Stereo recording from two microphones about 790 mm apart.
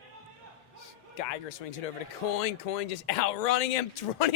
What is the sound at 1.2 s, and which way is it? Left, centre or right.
Speech, left.